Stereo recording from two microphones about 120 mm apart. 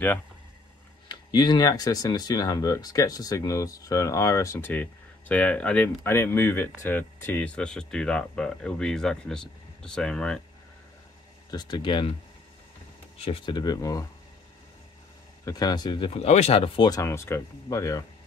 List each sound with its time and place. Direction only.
1.0 s speech: 35° left (ahead or behind); by 10.4 s 5° left (ahead or behind)
11.5 s speech: 40° left (ahead or behind)
13.5 s speech: 35° left (ahead or behind)
15.4 s speech: 35° left (ahead or behind)
16.1 s speech: 60° left (ahead or behind)
16.8 s speech: 25° left (ahead or behind)